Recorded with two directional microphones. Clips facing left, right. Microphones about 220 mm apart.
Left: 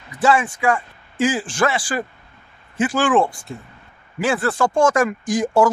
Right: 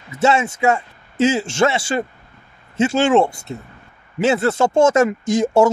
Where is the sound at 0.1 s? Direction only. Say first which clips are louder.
Right 1 dB; 25° right (ahead or behind).